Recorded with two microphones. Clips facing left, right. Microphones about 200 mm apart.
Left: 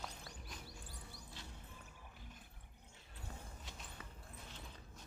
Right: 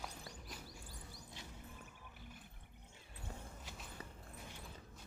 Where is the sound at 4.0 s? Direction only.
35° right (ahead or behind).